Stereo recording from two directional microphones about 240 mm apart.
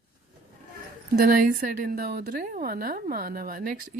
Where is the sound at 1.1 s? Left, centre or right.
Right.